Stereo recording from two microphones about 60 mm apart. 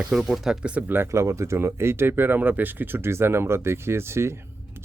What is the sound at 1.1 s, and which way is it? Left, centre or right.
Speech, right.